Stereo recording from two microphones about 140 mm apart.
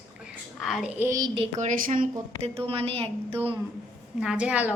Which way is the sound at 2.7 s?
45° right (ahead or behind).